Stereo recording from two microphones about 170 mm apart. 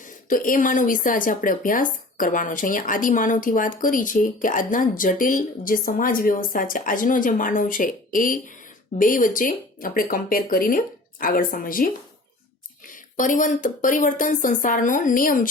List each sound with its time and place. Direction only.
0.0 s speech: 55° left (ahead or behind)